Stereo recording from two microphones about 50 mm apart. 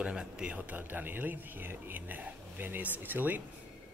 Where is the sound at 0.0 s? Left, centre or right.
Centre.